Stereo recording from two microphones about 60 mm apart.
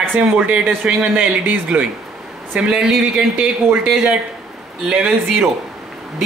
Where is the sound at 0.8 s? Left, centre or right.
Right.